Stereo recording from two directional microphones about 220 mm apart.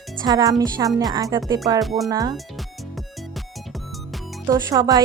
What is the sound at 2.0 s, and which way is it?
Speech, 15° right (ahead or behind).